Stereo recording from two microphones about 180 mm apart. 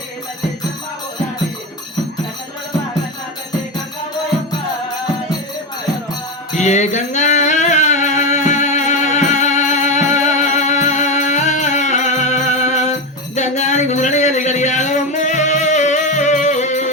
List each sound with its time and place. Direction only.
6.6 s music: 40° left (ahead or behind)